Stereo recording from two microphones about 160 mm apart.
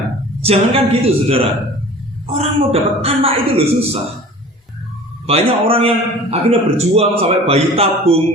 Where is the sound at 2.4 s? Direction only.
35° right (ahead or behind).